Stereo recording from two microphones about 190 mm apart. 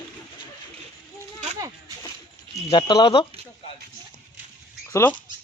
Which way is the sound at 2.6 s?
25° left (ahead or behind).